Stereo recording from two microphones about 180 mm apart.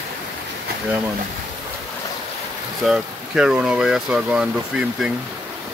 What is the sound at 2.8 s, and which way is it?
Speech, centre (ahead or behind).